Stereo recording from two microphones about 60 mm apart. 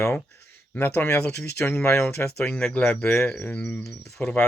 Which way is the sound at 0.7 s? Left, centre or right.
Left.